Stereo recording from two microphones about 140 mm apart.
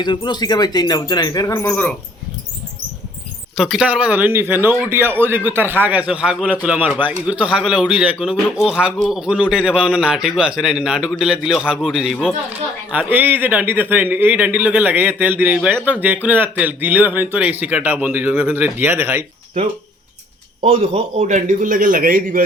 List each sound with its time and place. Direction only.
0.0 s speech: 30° left (ahead or behind)
1.7 s speech: 10° left (ahead or behind)
3.6 s a man's voice: 5° right (ahead or behind)
20.7 s a man's voice: 50° right (ahead or behind); by 22.4 s 80° right